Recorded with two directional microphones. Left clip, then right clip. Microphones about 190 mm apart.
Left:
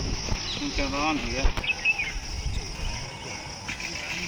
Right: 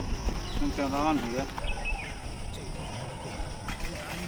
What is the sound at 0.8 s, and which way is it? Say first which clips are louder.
Speech: left 1 dB; 15° right (ahead or behind).